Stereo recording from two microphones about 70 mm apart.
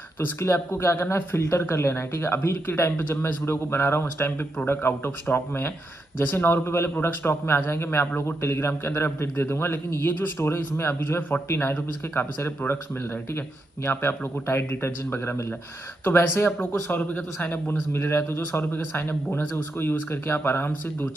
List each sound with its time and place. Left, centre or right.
0.2 s a man's voice: left
13.8 s a man's voice: left